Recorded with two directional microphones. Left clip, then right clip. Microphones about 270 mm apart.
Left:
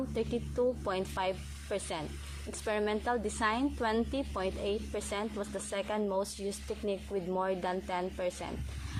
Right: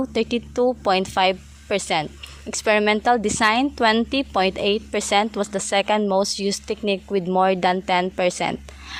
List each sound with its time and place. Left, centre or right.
0.1 s a woman's voice: right